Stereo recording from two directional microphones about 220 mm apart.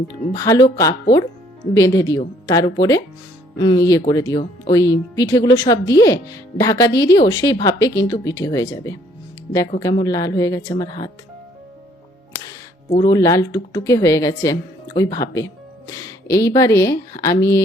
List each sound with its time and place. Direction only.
0.3 s speech: 15° left (ahead or behind)
12.9 s speech: 20° left (ahead or behind)